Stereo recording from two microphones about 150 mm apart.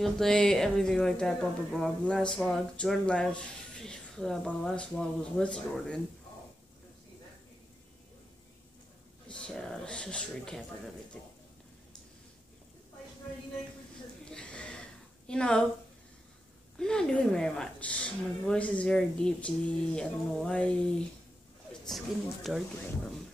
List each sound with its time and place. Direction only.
0.0 s speech: centre (ahead or behind)
9.3 s speech: 5° left (ahead or behind)
14.3 s a sound: 5° left (ahead or behind)
16.7 s speech: 5° left (ahead or behind)
21.8 s speech: centre (ahead or behind)